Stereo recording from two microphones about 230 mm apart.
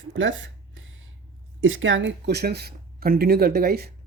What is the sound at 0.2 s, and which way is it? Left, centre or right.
Speech, right.